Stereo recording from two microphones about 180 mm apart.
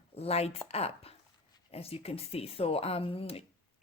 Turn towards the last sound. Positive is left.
turn(degrees=35)  # may be behind; listen again after turning